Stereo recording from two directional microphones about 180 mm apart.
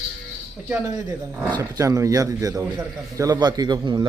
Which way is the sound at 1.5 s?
20° right (ahead or behind).